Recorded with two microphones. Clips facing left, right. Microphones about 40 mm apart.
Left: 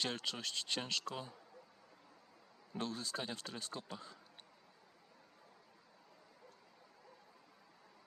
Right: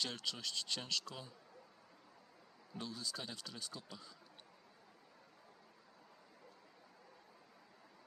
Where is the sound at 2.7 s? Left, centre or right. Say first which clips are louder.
Left 4 dB; left.